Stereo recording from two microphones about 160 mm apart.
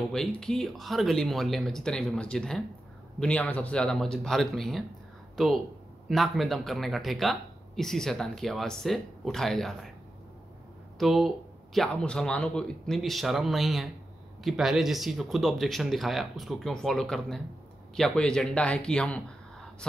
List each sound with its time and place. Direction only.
0.1 s speech: 5° left (ahead or behind)
11.0 s speech: centre (ahead or behind)